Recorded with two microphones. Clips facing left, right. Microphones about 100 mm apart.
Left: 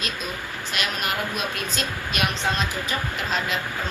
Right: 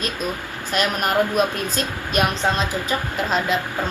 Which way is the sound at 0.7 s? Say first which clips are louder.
Right 7 dB; 40° right (ahead or behind).